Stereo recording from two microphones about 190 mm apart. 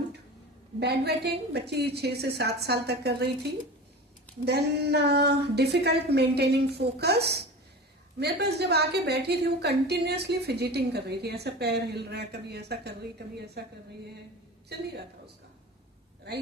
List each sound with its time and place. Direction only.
0.8 s a woman's voice: 60° right (ahead or behind)
4.4 s a woman's voice: 60° right (ahead or behind)
14.7 s a woman's voice: 60° right (ahead or behind)